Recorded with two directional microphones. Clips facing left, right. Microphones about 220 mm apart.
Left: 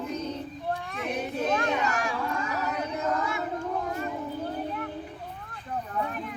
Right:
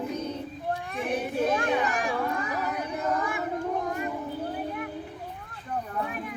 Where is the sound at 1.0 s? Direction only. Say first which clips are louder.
Right 4 dB; 10° right (ahead or behind).